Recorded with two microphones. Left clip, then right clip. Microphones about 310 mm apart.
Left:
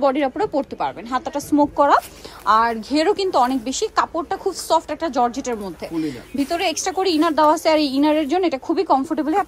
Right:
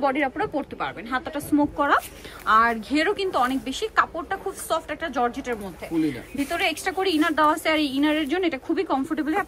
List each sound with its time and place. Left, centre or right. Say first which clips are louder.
0.0 s a woman's voice: left 5 dB; centre